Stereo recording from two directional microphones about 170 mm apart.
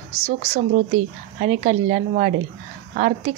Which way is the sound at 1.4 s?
45° right (ahead or behind).